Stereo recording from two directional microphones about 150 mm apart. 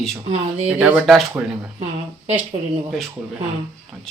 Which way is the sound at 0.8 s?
10° right (ahead or behind).